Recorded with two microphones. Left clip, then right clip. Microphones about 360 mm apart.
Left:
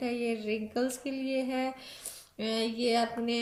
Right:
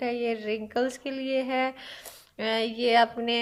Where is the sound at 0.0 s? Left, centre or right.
Centre.